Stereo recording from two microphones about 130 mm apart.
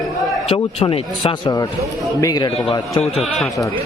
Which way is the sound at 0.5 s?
45° left (ahead or behind).